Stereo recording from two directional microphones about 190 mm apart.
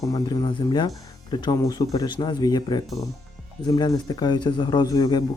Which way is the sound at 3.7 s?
20° left (ahead or behind).